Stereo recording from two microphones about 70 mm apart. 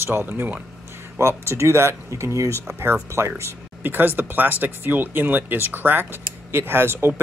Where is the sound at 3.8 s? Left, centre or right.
Right.